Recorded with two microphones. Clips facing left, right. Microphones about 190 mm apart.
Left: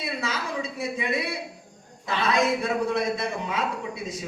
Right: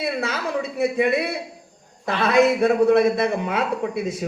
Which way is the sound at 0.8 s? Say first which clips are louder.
Right 10 dB; 60° right (ahead or behind).